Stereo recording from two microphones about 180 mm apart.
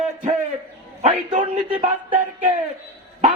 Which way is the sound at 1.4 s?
30° right (ahead or behind).